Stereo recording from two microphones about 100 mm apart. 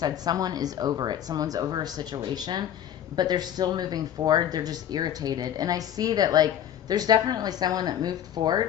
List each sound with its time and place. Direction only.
0.0 s speech: 40° right (ahead or behind)